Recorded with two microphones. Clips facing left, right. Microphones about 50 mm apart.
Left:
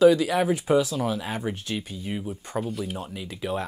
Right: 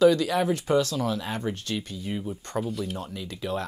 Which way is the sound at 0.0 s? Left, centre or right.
Centre.